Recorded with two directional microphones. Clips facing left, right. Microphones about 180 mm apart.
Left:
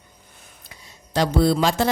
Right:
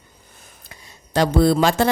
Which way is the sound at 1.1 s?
55° right (ahead or behind).